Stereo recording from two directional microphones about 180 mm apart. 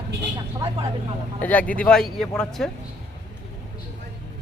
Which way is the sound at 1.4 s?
10° left (ahead or behind).